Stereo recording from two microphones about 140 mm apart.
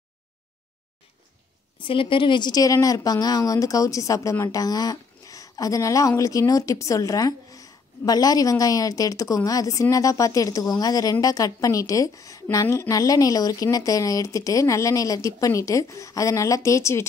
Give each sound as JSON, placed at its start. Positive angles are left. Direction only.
{"t": 1.8, "sound": "speech", "side_deg": 40}